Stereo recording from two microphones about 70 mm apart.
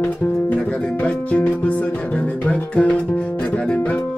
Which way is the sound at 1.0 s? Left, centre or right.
Centre.